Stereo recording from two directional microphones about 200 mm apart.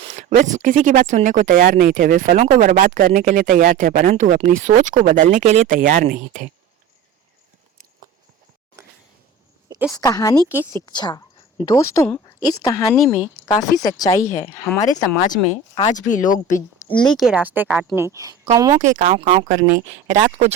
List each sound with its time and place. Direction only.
0.0 s speech: 35° right (ahead or behind)
8.8 s a sound: 15° right (ahead or behind)
9.9 s speech: 15° left (ahead or behind)
13.2 s speech: centre (ahead or behind)
14.0 s speech: 15° left (ahead or behind)
15.9 s speech: 40° left (ahead or behind)
16.5 s a woman's voice: 15° left (ahead or behind)
17.1 s speech: centre (ahead or behind); by 18.8 s 15° right (ahead or behind)
18.8 s speech: 40° right (ahead or behind)